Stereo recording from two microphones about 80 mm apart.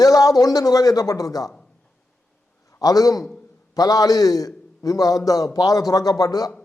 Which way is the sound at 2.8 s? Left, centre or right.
Left.